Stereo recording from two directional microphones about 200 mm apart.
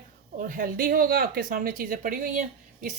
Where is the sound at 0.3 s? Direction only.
45° right (ahead or behind).